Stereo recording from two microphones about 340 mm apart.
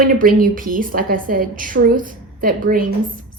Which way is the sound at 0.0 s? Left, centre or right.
Right.